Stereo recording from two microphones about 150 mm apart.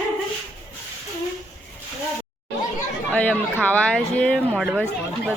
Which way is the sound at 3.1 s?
10° left (ahead or behind).